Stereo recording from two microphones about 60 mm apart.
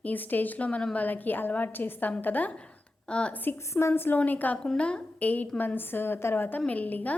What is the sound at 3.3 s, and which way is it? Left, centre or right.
Speech, left.